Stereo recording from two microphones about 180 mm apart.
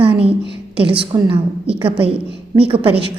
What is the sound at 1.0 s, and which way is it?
A woman's voice, 30° right (ahead or behind).